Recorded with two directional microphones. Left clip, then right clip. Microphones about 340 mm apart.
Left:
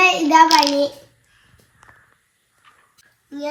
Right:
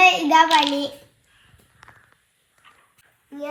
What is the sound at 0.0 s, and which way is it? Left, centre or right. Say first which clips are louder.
Child singing: left 2 dB; centre.